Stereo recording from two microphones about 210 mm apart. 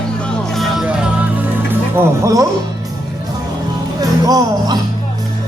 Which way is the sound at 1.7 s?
15° right (ahead or behind).